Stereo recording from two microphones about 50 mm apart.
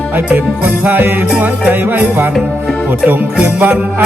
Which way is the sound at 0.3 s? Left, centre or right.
Right.